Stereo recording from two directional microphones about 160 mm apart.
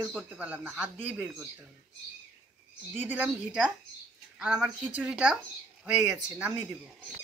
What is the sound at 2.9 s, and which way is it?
Speech, 10° right (ahead or behind).